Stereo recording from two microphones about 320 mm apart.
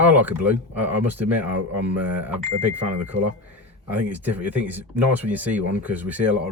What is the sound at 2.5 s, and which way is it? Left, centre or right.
Speech, right.